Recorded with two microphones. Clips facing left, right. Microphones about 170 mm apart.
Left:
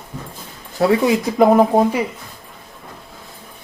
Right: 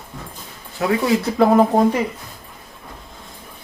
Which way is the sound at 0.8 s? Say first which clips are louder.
Left 5 dB; 35° left (ahead or behind).